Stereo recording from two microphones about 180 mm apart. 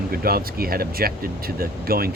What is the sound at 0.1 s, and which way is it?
Speech, 55° right (ahead or behind).